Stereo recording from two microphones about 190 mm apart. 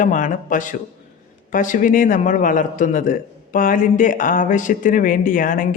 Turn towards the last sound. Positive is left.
turn(degrees=45)  # may be behind; listen again after turning